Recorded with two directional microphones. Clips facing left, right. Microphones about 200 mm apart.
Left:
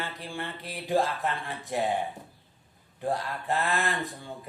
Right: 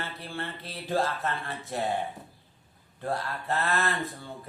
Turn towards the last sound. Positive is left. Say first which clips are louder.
# even
turn(degrees=15)  # may be behind; listen again after turning